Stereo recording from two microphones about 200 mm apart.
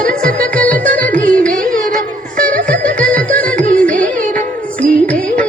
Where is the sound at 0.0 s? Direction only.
45° right (ahead or behind).